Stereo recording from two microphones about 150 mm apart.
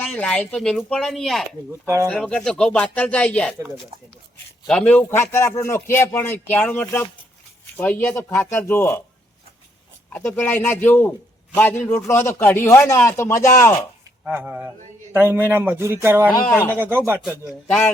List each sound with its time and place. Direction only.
0.0 s a man's voice: centre (ahead or behind)
4.6 s a man's voice: 5° left (ahead or behind)
10.1 s a man's voice: 10° left (ahead or behind)
14.3 s a man's voice: 10° right (ahead or behind)
16.5 s a man's voice: 10° left (ahead or behind)
16.7 s a man's voice: 15° right (ahead or behind)
17.7 s a man's voice: 10° left (ahead or behind)